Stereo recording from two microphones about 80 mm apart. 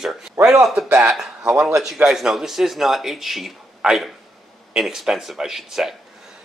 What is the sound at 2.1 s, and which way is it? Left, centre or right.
A man's voice, centre.